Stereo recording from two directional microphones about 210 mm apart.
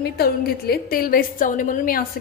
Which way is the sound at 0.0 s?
50° left (ahead or behind).